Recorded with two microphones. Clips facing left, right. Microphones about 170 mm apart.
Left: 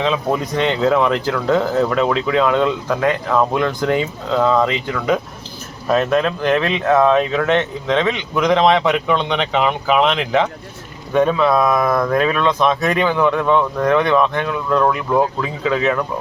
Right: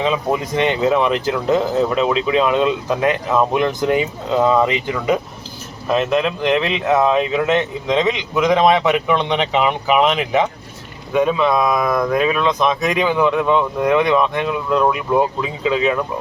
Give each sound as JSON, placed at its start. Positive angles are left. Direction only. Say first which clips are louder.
{"t": 0.0, "sound": "speech", "louder": "even", "side_deg": -10}